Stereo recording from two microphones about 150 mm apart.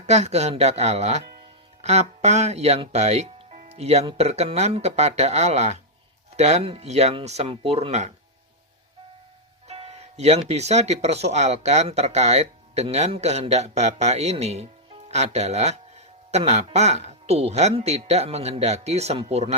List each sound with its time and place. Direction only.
0.0 s speech: 45° right (ahead or behind)
9.6 s music: 45° right (ahead or behind)
10.5 s speech: 45° right (ahead or behind)